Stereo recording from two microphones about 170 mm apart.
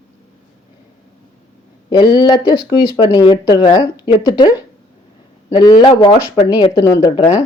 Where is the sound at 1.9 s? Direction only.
25° left (ahead or behind).